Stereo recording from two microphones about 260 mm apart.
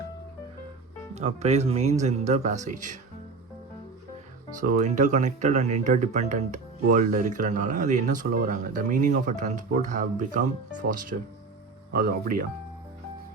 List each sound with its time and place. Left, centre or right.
1.1 s speech: right
4.6 s speech: right